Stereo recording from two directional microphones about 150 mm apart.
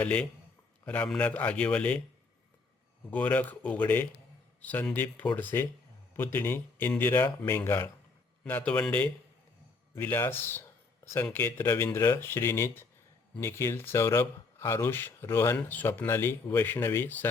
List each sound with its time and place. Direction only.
0.0 s speech: 5° left (ahead or behind)
3.1 s speech: 10° left (ahead or behind)